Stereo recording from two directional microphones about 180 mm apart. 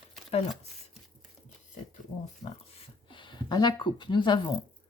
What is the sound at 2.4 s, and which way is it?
Speech, 30° left (ahead or behind).